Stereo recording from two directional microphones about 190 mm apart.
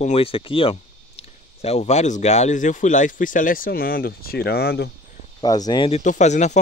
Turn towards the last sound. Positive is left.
turn(degrees=40)  # may be behind; listen again after turning